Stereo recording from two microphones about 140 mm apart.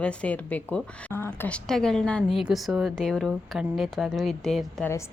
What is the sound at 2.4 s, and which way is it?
Speech, 5° right (ahead or behind).